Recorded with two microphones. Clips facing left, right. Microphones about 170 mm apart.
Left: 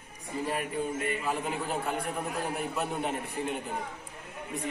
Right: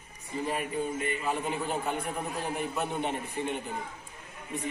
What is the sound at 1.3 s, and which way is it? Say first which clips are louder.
A man's voice: right 1 dB; 5° left (ahead or behind).